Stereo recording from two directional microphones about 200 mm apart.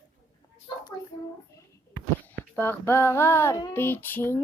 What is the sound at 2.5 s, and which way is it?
Female singing, 10° left (ahead or behind).